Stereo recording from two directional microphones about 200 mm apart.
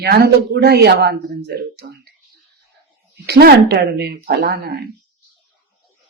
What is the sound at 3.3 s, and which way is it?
Speech, 50° right (ahead or behind).